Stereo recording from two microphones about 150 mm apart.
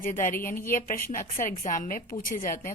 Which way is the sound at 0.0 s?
65° left (ahead or behind).